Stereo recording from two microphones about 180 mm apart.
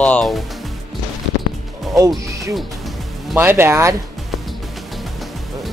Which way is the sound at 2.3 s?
15° right (ahead or behind).